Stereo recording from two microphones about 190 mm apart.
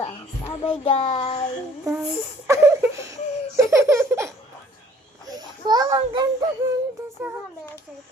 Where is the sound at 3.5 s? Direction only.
15° right (ahead or behind).